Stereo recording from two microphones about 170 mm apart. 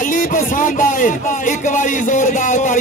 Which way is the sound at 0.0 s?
50° left (ahead or behind).